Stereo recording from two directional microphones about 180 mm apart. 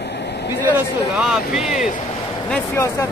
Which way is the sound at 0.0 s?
70° left (ahead or behind).